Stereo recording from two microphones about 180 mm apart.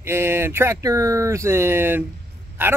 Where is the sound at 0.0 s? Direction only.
15° right (ahead or behind).